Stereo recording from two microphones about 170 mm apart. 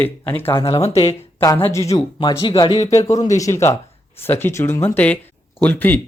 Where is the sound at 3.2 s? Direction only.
20° left (ahead or behind).